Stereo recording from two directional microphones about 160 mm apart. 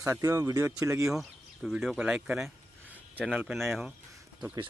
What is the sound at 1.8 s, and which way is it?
Speech, 5° right (ahead or behind).